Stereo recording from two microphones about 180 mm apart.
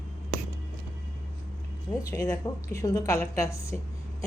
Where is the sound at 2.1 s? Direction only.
20° left (ahead or behind).